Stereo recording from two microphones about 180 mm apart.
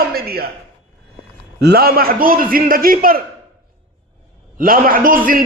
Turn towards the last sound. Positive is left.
turn(degrees=-50)  # may be behind; listen again after turning